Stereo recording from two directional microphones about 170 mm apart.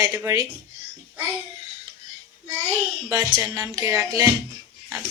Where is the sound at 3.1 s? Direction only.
20° right (ahead or behind).